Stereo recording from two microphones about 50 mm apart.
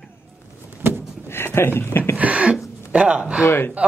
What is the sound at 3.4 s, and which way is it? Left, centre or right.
Speech, left.